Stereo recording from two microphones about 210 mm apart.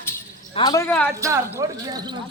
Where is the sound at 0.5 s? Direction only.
20° left (ahead or behind).